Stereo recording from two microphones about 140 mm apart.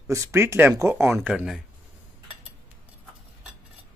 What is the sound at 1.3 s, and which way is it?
Speech, 5° right (ahead or behind).